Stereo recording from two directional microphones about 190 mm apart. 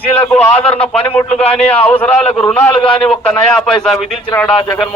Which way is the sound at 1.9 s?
10° left (ahead or behind).